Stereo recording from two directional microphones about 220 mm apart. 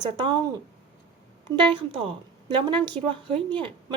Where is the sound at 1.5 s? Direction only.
20° right (ahead or behind).